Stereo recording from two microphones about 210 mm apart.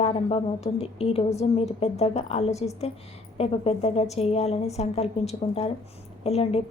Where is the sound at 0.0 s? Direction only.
30° left (ahead or behind).